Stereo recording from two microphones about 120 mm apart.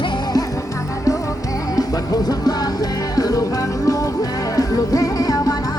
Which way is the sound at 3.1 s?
30° left (ahead or behind).